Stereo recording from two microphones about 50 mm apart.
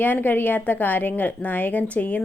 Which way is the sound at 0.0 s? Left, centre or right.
Left.